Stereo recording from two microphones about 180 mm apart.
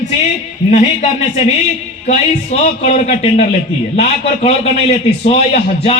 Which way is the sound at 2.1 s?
40° left (ahead or behind).